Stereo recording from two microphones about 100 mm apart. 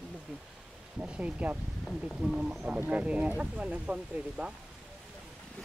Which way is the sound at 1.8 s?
Centre (ahead or behind).